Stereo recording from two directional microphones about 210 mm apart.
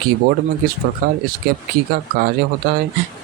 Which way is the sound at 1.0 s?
45° right (ahead or behind).